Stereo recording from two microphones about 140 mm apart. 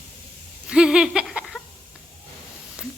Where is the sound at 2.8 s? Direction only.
5° right (ahead or behind).